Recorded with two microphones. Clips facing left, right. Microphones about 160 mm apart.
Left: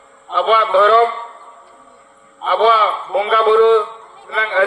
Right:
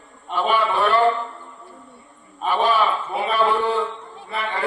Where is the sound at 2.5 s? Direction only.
90° left.